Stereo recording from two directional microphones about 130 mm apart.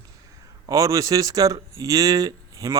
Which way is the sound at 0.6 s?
25° right (ahead or behind).